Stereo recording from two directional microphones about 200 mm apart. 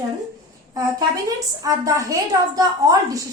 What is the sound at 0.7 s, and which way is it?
A woman's voice, 20° right (ahead or behind).